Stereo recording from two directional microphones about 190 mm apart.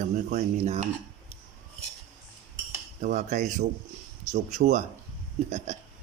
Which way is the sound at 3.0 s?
40° right (ahead or behind).